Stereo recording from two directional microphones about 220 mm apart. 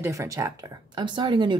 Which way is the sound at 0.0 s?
15° right (ahead or behind).